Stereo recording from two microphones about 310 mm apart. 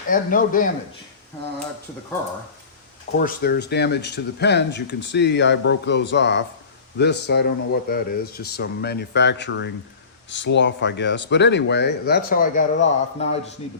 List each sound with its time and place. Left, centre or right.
0.1 s a man's voice: left
3.2 s speech: left